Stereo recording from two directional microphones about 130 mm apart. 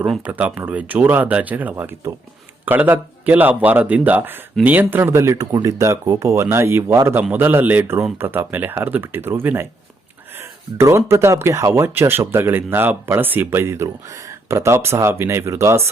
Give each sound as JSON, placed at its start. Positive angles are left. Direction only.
{"t": 0.3, "sound": "speech", "side_deg": -10}